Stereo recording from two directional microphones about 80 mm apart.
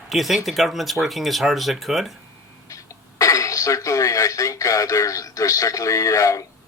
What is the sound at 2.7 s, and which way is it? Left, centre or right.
Speech, left.